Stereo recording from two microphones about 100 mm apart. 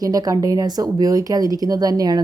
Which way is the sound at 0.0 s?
35° right (ahead or behind).